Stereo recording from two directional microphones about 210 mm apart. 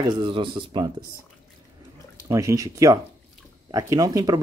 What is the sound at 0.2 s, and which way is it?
Speech, 25° right (ahead or behind).